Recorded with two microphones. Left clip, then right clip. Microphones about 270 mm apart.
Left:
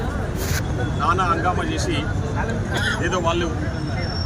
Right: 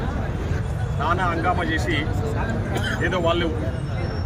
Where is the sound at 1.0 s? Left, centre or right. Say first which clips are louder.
Left 2 dB; centre.